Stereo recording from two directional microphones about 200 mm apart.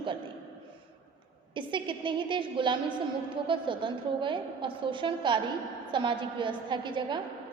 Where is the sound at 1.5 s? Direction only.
25° right (ahead or behind).